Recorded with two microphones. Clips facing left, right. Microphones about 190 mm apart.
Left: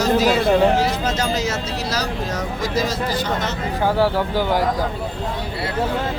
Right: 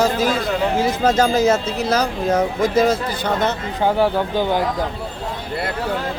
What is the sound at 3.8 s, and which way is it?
Speech, 20° right (ahead or behind).